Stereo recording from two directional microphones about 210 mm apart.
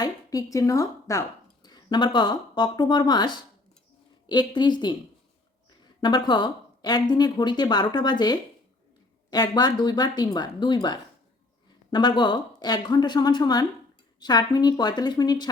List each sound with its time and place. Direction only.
0.0 s a woman's voice: 15° left (ahead or behind)
6.0 s speech: 20° left (ahead or behind)